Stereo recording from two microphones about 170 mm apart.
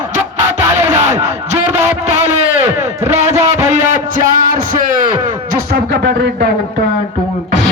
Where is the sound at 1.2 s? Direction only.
45° right (ahead or behind).